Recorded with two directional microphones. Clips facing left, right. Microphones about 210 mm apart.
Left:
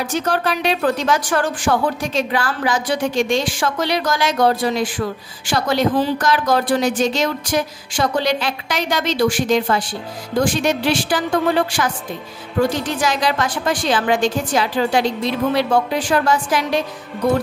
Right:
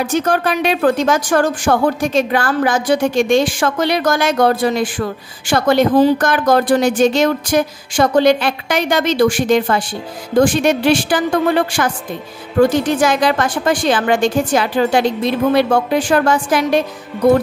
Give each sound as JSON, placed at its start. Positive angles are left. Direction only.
{"t": 0.0, "sound": "speech", "side_deg": -50}
{"t": 13.0, "sound": "speech", "side_deg": -50}